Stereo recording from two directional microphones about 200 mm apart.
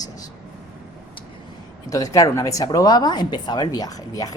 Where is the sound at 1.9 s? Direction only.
15° left (ahead or behind).